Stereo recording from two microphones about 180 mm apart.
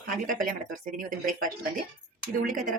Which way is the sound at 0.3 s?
50° right (ahead or behind).